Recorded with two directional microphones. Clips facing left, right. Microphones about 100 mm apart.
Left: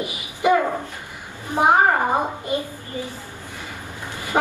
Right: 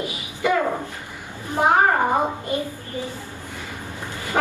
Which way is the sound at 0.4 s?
20° left (ahead or behind).